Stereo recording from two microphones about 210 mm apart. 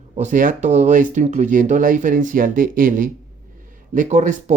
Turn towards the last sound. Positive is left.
turn(degrees=-35)  # may be behind; listen again after turning